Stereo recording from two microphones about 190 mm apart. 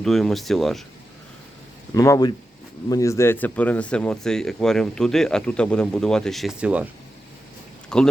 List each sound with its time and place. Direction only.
0.0 s speech: centre (ahead or behind)
2.0 s speech: 20° left (ahead or behind); by 6.8 s 5° right (ahead or behind)
7.9 s speech: 5° left (ahead or behind)